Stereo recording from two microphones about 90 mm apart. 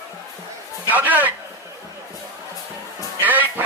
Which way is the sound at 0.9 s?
20° right (ahead or behind).